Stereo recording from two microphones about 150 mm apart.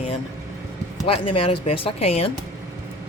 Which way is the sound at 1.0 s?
35° left (ahead or behind).